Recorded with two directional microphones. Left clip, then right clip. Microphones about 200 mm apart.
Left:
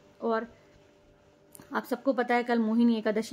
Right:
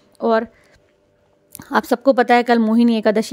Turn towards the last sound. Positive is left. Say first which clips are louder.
# right 11 dB
turn(degrees=-45)  # may be behind; listen again after turning